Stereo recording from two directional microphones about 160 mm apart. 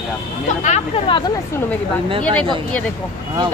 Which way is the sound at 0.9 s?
30° left (ahead or behind).